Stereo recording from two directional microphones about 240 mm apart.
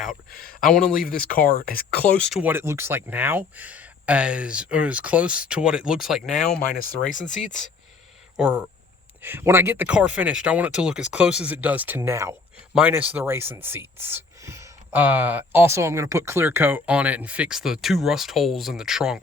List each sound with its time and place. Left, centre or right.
0.3 s speech: centre
0.9 s speech: left
1.9 s speech: centre
7.1 s speech: left
8.4 s speech: centre